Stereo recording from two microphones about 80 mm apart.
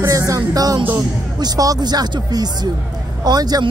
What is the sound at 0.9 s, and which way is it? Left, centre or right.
Speech, right.